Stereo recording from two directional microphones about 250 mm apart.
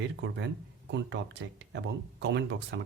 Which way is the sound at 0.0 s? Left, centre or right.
Right.